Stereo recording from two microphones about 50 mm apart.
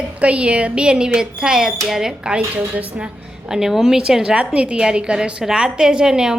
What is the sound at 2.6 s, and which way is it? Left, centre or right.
Speech, right.